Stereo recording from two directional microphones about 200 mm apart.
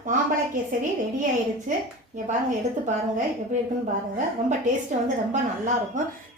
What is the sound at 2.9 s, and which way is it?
Speech, 40° right (ahead or behind).